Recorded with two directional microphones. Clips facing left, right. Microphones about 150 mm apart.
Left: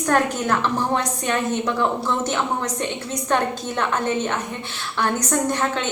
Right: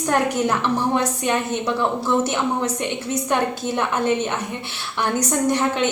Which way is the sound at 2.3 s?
15° right (ahead or behind).